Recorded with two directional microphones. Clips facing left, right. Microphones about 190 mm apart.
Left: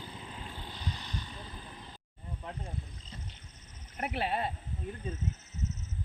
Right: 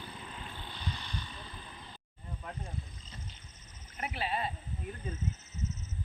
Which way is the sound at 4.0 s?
60° left (ahead or behind).